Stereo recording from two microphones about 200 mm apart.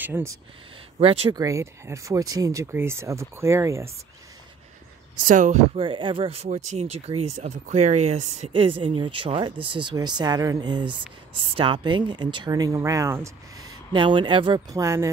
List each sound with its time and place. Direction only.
0.0 s speech: 10° right (ahead or behind)
0.9 s speech: 30° right (ahead or behind)
1.4 s speech: 15° right (ahead or behind)
5.2 s speech: 40° right (ahead or behind)
5.8 s speech: 25° right (ahead or behind)